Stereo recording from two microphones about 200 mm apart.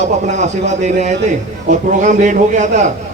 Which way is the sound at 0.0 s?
35° right (ahead or behind).